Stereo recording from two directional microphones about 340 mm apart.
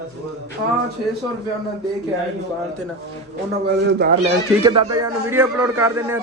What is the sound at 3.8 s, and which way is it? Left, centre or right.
Speech, right.